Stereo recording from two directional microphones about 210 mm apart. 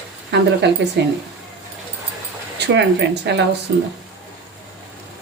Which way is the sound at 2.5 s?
55° right (ahead or behind).